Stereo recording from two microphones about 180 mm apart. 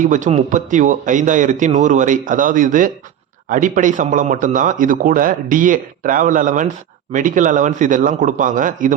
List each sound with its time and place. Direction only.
0.0 s speech: 45° right (ahead or behind)